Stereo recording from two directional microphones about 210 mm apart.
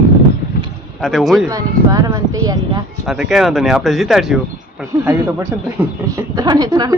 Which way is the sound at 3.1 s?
Centre (ahead or behind).